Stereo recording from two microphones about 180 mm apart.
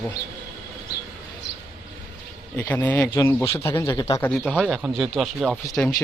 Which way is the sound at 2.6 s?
15° left (ahead or behind).